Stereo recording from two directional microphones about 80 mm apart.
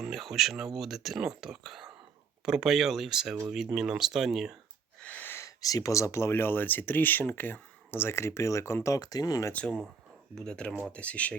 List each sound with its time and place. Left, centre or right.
0.0 s speech: centre
5.0 s wheeze: left
5.4 s speech: left
9.0 s speech: left
9.5 s speech: centre